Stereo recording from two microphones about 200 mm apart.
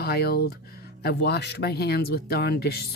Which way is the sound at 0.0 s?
50° left (ahead or behind).